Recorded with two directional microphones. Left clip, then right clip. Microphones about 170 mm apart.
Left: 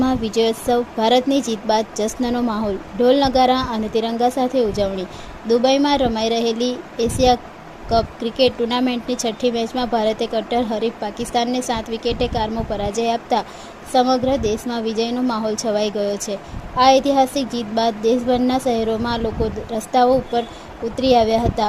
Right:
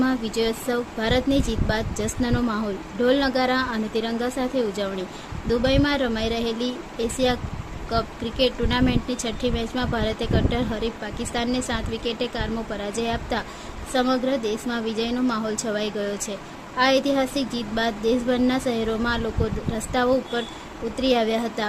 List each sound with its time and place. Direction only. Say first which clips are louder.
0.0 s speech: left 5 dB; 15° left (ahead or behind)